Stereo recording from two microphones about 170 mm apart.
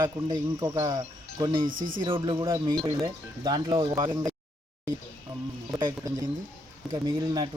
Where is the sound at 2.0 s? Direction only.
30° right (ahead or behind).